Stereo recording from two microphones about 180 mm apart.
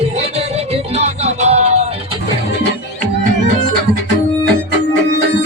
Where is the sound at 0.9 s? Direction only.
35° right (ahead or behind).